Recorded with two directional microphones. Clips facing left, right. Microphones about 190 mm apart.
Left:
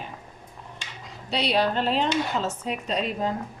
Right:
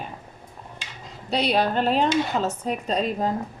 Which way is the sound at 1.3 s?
45° right (ahead or behind).